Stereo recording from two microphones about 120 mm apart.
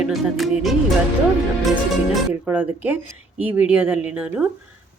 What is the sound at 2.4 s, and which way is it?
Speech, 15° right (ahead or behind).